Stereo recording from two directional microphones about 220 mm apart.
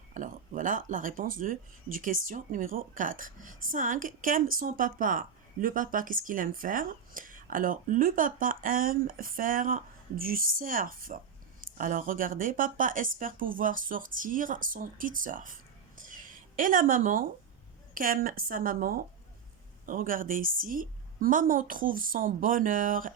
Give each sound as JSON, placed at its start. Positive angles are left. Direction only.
{"t": 0.1, "sound": "speech", "side_deg": -35}
{"t": 16.0, "sound": "a sound", "side_deg": -40}
{"t": 17.9, "sound": "speech", "side_deg": -40}